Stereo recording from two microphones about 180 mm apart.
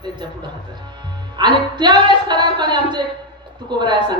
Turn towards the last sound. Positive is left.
turn(degrees=-25)  # may be behind; listen again after turning